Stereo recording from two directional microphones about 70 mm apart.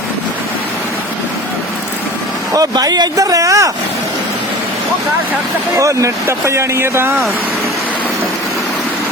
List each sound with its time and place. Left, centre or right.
2.6 s speech: right
3.2 s speech: right
5.7 s speech: right